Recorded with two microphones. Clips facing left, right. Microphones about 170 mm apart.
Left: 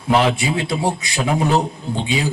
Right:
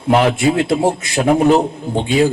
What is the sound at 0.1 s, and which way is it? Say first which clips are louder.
A man's voice: right 4 dB; 50° right (ahead or behind).